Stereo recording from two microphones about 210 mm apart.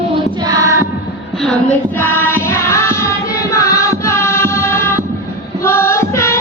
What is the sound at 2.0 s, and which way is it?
Music, 10° left (ahead or behind).